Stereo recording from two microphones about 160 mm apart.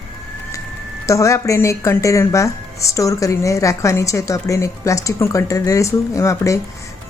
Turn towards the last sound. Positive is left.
turn(degrees=20)  # may be behind; listen again after turning